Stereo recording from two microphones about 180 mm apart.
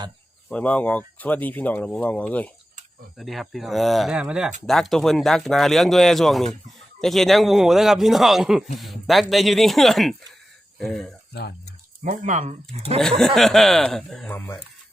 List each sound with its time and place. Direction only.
0.5 s speech: 10° left (ahead or behind)
12.0 s speech: 45° right (ahead or behind)
13.0 s speech: centre (ahead or behind)